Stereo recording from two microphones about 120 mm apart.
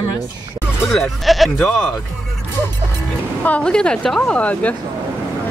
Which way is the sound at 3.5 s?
10° left (ahead or behind).